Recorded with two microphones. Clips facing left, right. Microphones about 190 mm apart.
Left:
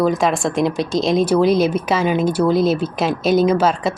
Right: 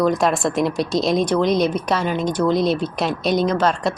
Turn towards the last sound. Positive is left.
turn(degrees=5)  # may be behind; listen again after turning